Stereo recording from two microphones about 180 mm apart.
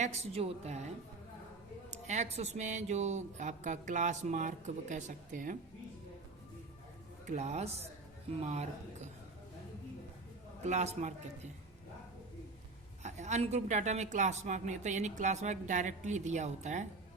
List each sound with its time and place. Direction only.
0.0 s a woman's voice: 35° right (ahead or behind)
1.9 s a woman's voice: 40° right (ahead or behind)
7.3 s a woman's voice: 40° right (ahead or behind)
10.7 s a woman's voice: 40° right (ahead or behind)
13.0 s a woman's voice: 40° right (ahead or behind)